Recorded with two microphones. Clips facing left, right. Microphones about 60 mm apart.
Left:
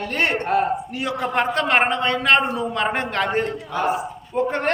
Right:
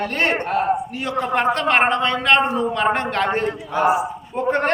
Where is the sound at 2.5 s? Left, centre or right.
Centre.